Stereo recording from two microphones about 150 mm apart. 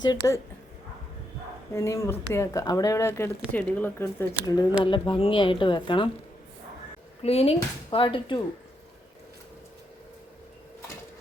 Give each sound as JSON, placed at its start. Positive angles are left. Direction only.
{"t": 0.2, "sound": "speech", "side_deg": 20}
{"t": 1.7, "sound": "speech", "side_deg": 20}
{"t": 4.8, "sound": "speech", "side_deg": 35}
{"t": 7.2, "sound": "speech", "side_deg": 40}